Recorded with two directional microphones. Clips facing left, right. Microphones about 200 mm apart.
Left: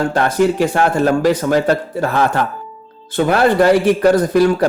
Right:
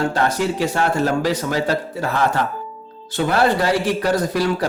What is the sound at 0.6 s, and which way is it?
A man's voice, 55° left (ahead or behind).